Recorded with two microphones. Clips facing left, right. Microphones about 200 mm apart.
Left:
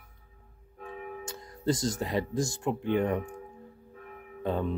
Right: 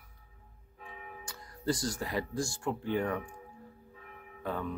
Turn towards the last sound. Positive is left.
turn(degrees=25)  # may be behind; listen again after turning